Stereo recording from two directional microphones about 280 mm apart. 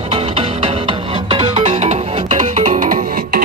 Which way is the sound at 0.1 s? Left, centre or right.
Right.